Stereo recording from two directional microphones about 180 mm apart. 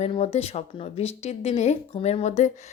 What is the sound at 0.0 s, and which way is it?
A woman's voice, 35° left (ahead or behind).